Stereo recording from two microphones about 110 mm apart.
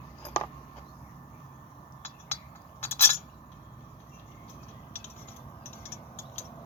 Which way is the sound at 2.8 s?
20° left (ahead or behind).